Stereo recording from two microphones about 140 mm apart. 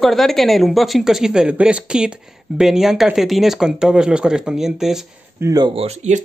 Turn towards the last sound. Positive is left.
turn(degrees=-55)  # may be behind; listen again after turning